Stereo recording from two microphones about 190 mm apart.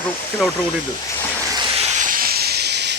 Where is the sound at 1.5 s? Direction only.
25° right (ahead or behind); by 2.9 s 60° right (ahead or behind).